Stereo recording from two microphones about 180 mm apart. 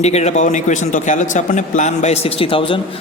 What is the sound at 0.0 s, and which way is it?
A man's voice, 35° left (ahead or behind).